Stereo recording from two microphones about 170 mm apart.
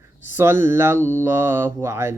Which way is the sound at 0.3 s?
15° right (ahead or behind).